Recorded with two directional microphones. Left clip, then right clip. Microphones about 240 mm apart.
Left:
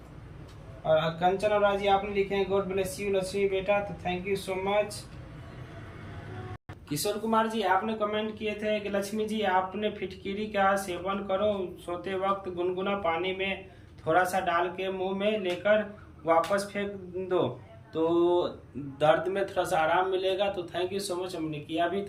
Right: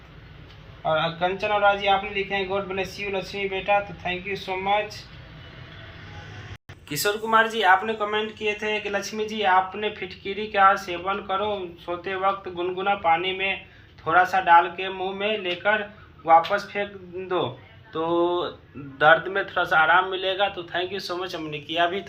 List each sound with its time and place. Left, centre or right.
0.9 s a man's voice: centre
7.0 s speech: right
7.9 s a man's voice: centre